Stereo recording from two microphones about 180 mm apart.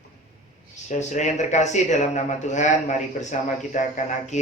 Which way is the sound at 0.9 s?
40° left (ahead or behind).